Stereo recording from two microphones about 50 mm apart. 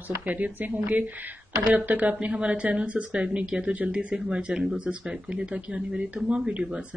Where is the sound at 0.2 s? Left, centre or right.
Right.